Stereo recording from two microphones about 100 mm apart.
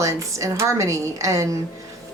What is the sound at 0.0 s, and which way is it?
A woman's voice, 30° right (ahead or behind).